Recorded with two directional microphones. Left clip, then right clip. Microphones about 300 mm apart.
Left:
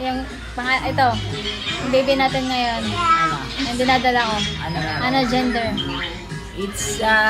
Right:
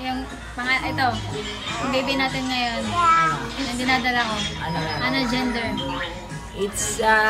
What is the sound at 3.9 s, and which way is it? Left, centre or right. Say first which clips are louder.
A woman's voice: left 3 dB; centre.